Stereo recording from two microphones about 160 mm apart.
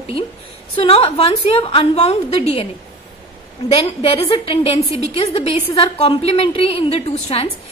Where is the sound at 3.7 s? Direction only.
35° left (ahead or behind).